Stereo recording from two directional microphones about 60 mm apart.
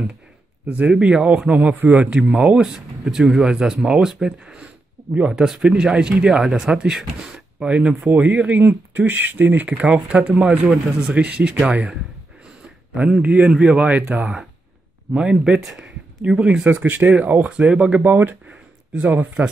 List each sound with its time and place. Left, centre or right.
0.7 s speech: centre
2.6 s speech: centre
12.6 s a sound: centre
13.5 s speech: centre
18.0 s speech: right
19.4 s speech: centre